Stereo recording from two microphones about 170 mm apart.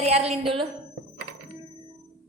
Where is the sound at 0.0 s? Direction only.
40° right (ahead or behind).